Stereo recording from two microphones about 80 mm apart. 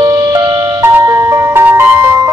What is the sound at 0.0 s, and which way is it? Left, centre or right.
Music, right.